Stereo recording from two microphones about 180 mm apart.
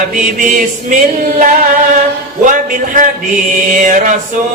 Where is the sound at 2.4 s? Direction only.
45° right (ahead or behind).